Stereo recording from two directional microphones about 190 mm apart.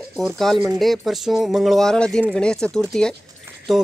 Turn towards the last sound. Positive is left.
turn(degrees=0)  # may be behind; listen again after turning